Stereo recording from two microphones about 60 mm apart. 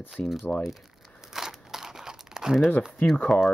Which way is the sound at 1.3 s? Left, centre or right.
Centre.